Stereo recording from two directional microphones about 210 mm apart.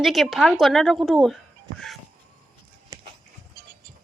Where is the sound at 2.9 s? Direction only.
15° right (ahead or behind).